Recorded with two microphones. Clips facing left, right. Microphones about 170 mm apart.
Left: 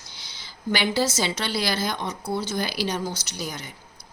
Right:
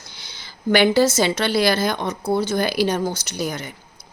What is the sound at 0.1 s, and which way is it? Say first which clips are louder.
Speech: right 3 dB; 55° right (ahead or behind).